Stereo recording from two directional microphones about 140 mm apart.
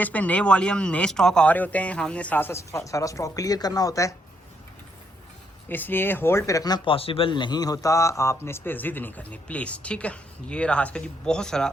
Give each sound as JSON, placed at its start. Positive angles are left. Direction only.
{"t": 0.0, "sound": "speech", "side_deg": 10}
{"t": 5.6, "sound": "speech", "side_deg": 15}